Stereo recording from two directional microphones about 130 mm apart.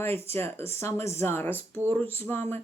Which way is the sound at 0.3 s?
20° left (ahead or behind).